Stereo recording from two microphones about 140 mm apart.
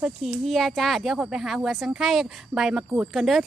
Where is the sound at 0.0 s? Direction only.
5° right (ahead or behind).